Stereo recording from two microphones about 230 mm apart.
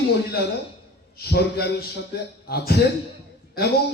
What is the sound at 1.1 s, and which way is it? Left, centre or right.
A man's voice, left.